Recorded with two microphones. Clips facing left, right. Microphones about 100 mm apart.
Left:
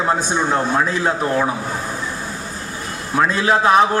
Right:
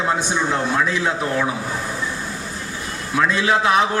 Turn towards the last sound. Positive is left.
turn(degrees=40)  # may be behind; listen again after turning